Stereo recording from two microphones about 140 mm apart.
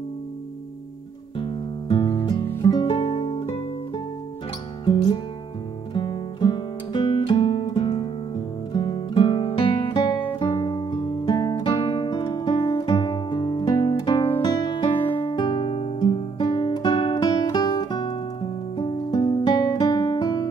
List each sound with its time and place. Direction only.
1.4 s music: 35° left (ahead or behind)
2.8 s music: 50° left (ahead or behind)
3.3 s music: 35° left (ahead or behind)
13.9 s guitar: 30° left (ahead or behind)
14.4 s music: 30° left (ahead or behind)